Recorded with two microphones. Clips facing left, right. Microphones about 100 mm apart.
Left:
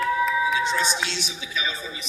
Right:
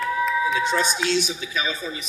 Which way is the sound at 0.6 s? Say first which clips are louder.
Right 2 dB; 50° right (ahead or behind).